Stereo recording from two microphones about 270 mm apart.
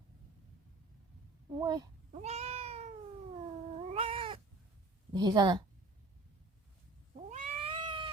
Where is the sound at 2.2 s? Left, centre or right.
Right.